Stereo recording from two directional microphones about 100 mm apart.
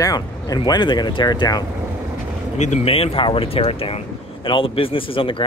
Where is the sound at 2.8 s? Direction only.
75° left (ahead or behind).